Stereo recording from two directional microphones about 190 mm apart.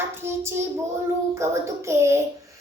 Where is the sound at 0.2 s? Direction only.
15° right (ahead or behind).